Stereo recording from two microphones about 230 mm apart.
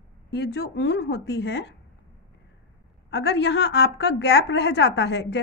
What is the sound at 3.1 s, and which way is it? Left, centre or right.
A woman's voice, left.